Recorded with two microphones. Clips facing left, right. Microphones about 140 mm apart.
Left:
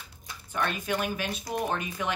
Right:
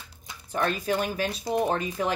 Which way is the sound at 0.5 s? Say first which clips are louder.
Right 4 dB; 35° right (ahead or behind).